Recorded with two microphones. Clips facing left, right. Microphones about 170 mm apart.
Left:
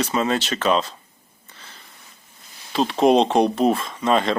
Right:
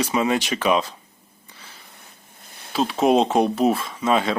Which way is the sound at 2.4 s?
55° right (ahead or behind).